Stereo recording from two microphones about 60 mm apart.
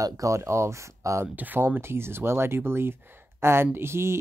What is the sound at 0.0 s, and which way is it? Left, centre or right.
Speech, right.